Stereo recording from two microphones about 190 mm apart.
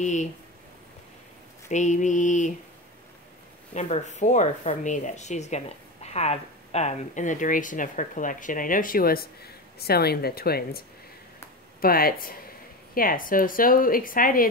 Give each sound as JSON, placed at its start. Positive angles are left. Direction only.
{"t": 0.0, "sound": "speech", "side_deg": 40}
{"t": 1.7, "sound": "speech", "side_deg": 40}
{"t": 3.7, "sound": "speech", "side_deg": 40}
{"t": 11.8, "sound": "a woman's voice", "side_deg": 50}